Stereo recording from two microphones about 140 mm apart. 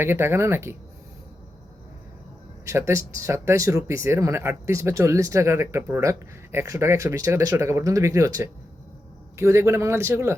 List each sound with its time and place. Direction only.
0.0 s speech: 15° right (ahead or behind)
2.6 s speech: 20° right (ahead or behind)